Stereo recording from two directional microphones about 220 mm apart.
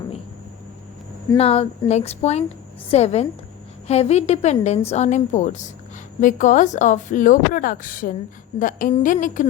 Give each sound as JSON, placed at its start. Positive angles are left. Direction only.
{"t": 1.4, "sound": "speech", "side_deg": 25}